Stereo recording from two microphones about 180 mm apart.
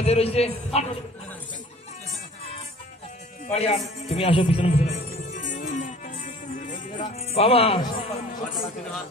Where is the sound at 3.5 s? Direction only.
35° left (ahead or behind).